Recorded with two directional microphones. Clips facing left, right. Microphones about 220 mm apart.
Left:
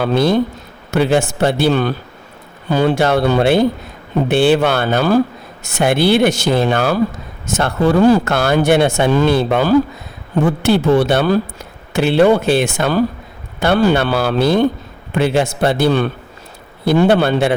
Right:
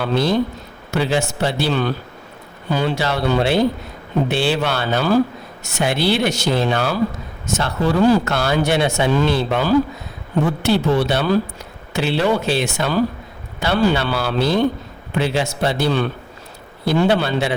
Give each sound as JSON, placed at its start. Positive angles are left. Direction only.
{"t": 0.0, "sound": "speech", "side_deg": 50}